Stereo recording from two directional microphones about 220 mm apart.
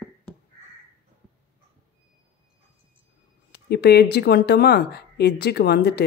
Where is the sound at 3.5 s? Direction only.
50° left (ahead or behind).